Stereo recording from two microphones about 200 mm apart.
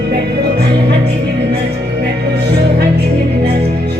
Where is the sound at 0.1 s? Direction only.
55° right (ahead or behind).